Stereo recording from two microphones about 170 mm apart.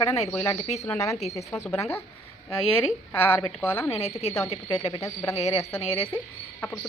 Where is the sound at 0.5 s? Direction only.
40° left (ahead or behind).